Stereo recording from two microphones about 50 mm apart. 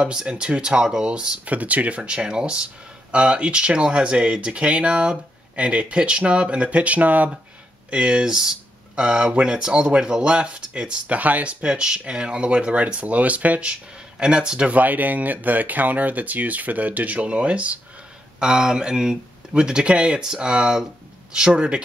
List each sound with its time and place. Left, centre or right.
0.0 s speech: centre
1.5 s speech: right
7.9 s speech: centre
11.6 s speech: centre
14.2 s speech: centre
14.7 s speech: right
18.4 s speech: centre